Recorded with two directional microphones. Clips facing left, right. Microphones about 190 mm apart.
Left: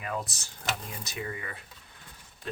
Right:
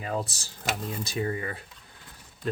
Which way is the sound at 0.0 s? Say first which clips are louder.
Right 4 dB; 30° right (ahead or behind).